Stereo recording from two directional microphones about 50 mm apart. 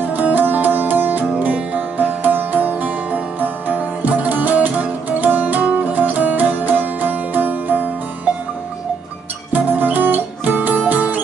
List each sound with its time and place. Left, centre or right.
0.1 s music: right
9.5 s music: right